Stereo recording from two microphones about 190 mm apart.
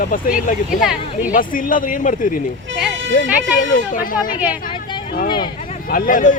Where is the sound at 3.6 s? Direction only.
45° left (ahead or behind).